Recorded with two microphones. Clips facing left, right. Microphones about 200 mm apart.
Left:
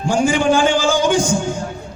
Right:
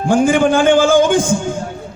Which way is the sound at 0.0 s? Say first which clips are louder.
Right 4 dB; 55° right (ahead or behind).